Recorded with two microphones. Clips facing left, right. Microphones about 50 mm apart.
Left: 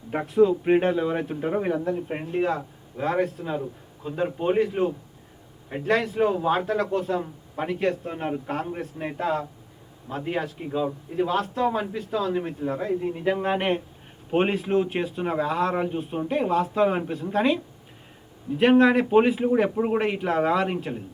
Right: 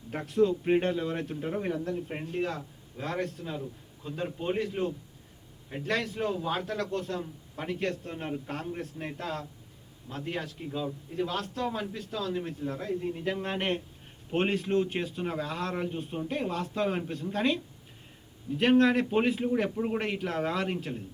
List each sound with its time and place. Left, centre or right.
0.1 s a man's voice: centre
10.6 s a man's voice: left
11.3 s speech: centre
19.7 s a man's voice: left
20.0 s speech: centre